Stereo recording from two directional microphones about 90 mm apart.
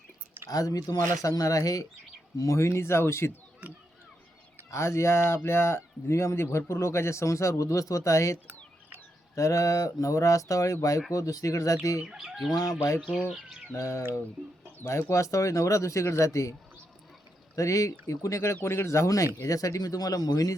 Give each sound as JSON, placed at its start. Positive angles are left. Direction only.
{"t": 0.4, "sound": "speech", "side_deg": 45}
{"t": 4.7, "sound": "speech", "side_deg": 30}
{"t": 12.0, "sound": "fowl", "side_deg": -5}
{"t": 13.2, "sound": "speech", "side_deg": -10}
{"t": 13.7, "sound": "speech", "side_deg": 35}
{"t": 15.1, "sound": "speech", "side_deg": 35}